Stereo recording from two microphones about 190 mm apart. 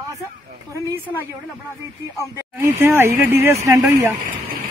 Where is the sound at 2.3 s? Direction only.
15° right (ahead or behind).